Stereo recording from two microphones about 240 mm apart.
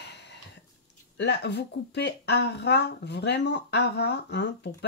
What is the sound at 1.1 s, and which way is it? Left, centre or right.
Speech, left.